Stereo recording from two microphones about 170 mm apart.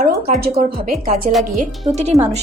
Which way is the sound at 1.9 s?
40° right (ahead or behind).